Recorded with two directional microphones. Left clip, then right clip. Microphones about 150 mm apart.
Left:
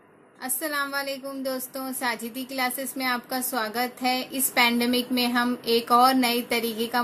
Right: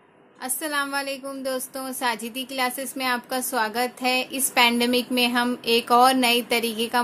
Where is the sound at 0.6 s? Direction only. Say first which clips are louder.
Right 2 dB; 20° right (ahead or behind).